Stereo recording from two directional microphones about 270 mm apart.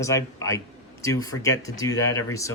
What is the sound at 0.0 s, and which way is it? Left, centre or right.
Speech, centre.